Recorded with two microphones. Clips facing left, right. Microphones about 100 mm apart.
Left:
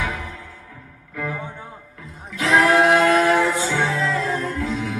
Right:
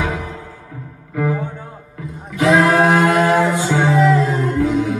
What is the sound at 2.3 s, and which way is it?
Music, 25° right (ahead or behind).